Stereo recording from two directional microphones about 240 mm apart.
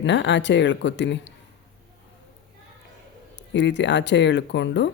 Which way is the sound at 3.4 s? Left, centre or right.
Left.